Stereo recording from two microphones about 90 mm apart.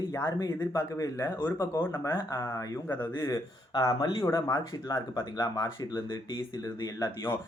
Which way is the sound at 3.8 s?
50° left (ahead or behind).